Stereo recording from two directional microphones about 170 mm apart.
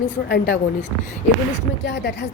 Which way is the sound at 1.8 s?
90° left.